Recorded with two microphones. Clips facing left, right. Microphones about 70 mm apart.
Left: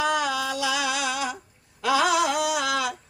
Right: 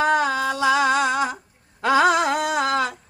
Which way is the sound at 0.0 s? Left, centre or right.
Right.